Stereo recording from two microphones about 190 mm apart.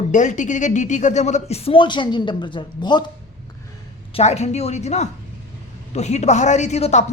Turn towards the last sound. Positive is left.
turn(degrees=35)  # may be behind; listen again after turning